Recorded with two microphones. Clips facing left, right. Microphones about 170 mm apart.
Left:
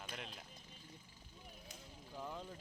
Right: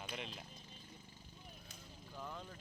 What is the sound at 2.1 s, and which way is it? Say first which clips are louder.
Speech: left 2 dB; 15° left (ahead or behind).